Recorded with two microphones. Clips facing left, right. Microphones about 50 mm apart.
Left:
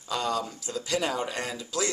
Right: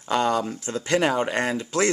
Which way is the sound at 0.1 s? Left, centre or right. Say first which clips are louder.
Right 7 dB; right.